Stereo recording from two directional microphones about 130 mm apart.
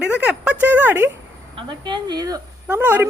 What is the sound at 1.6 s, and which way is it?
Speech, 35° right (ahead or behind).